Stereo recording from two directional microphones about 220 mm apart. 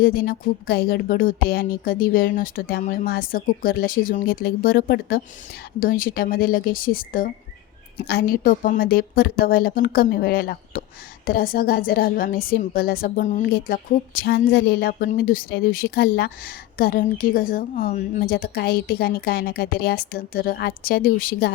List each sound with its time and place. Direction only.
0.0 s a woman's voice: 40° left (ahead or behind)